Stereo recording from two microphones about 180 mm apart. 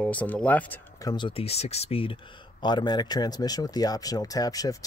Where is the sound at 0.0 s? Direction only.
10° left (ahead or behind).